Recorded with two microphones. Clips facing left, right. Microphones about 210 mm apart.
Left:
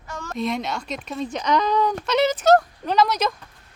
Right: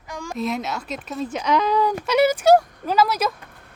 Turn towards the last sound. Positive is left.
turn(degrees=-5)  # may be behind; listen again after turning